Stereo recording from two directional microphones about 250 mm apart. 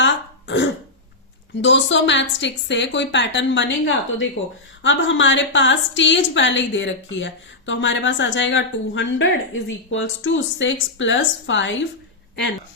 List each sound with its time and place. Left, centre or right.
0.0 s throat clearing: left
1.6 s a woman's voice: left